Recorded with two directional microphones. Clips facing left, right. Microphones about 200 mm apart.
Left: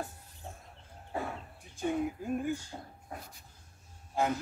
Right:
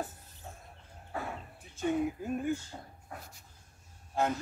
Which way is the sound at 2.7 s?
10° left (ahead or behind).